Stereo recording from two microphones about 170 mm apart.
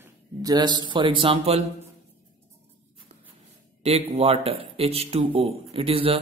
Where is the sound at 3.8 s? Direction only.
35° right (ahead or behind).